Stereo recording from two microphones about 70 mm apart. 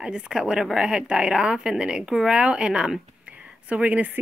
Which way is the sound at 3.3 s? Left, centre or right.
Centre.